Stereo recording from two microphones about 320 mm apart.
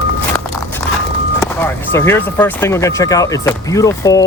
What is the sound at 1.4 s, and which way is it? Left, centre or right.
Speech, centre.